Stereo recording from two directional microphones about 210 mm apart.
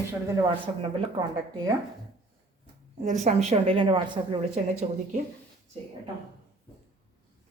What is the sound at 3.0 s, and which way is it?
Speech, 35° right (ahead or behind).